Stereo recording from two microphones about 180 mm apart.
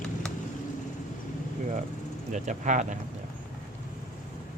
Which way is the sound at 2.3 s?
45° right (ahead or behind).